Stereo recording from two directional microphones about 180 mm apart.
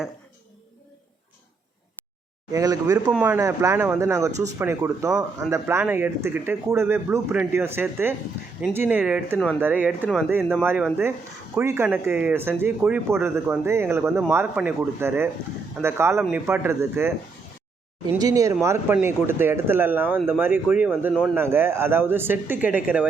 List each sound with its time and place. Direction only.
2.5 s speech: 20° right (ahead or behind)